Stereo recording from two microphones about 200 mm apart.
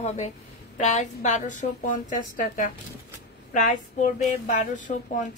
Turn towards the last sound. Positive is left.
turn(degrees=40)  # may be behind; listen again after turning